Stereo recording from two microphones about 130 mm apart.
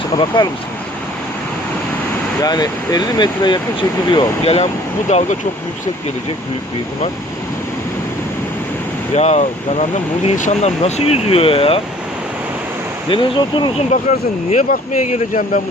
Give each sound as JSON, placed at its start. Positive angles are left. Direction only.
{"t": 2.4, "sound": "speech", "side_deg": 30}
{"t": 4.1, "sound": "speech", "side_deg": 50}
{"t": 9.1, "sound": "speech", "side_deg": 60}
{"t": 13.1, "sound": "speech", "side_deg": 40}
{"t": 13.9, "sound": "speech", "side_deg": 75}